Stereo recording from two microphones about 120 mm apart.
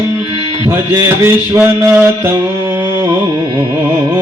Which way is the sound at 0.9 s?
20° right (ahead or behind).